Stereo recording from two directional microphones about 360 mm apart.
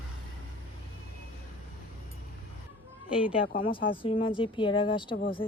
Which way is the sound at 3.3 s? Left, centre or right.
Centre.